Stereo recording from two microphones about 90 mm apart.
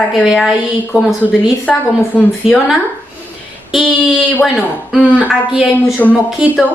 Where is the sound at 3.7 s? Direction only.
5° right (ahead or behind).